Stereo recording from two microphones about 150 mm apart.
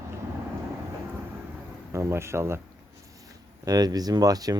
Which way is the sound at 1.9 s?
20° right (ahead or behind).